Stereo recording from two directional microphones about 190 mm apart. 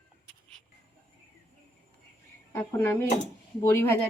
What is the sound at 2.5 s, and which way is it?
Speech, 10° left (ahead or behind).